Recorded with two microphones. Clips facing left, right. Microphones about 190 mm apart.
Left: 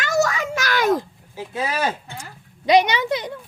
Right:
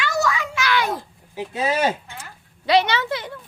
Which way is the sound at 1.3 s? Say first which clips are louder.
Right 3 dB; 20° right (ahead or behind).